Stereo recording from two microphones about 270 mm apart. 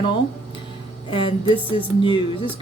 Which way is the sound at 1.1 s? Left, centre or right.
Centre.